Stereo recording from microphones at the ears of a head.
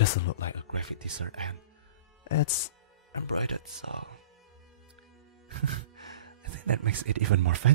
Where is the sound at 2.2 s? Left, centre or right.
Left.